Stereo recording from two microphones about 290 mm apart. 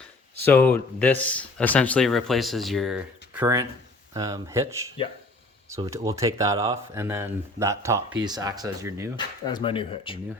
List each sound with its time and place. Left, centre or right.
0.4 s speech: centre
9.1 s speech: centre